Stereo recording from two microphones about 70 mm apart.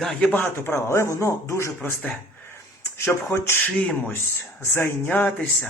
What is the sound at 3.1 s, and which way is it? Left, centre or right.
Speech, left.